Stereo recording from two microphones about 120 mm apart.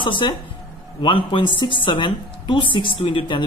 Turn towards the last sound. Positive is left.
turn(degrees=45)  # may be behind; listen again after turning